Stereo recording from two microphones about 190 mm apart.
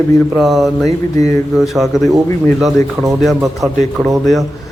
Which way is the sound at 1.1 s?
15° left (ahead or behind).